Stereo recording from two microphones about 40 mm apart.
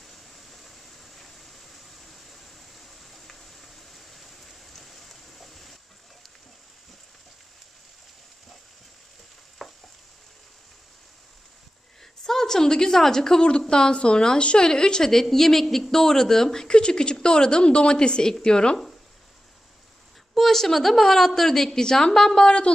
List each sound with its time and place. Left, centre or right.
0.0 s a sound: centre
9.6 s frying: centre
12.0 s a woman's voice: centre
13.4 s a woman's voice: left
20.3 s a woman's voice: centre; by 22.7 s left